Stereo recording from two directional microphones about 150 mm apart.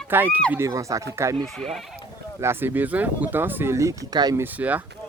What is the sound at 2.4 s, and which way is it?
Speech, 15° right (ahead or behind).